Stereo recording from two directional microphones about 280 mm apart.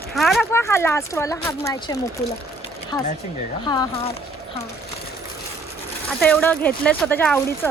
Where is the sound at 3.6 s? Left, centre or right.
Centre.